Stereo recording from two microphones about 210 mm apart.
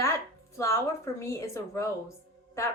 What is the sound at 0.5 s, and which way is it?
A woman's voice, 15° left (ahead or behind).